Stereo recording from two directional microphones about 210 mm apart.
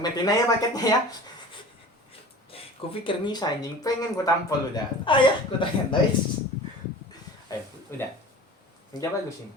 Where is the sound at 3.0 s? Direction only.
20° left (ahead or behind).